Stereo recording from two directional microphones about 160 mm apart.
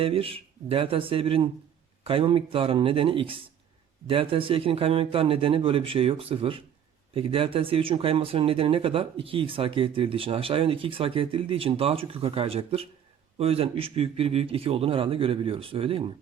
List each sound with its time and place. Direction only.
0.0 s speech: 35° right (ahead or behind)